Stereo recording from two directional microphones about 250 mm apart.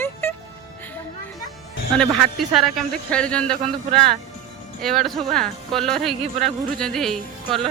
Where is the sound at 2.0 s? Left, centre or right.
Centre.